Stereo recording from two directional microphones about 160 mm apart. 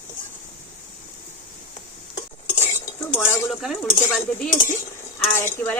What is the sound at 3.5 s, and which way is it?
Speech, centre (ahead or behind).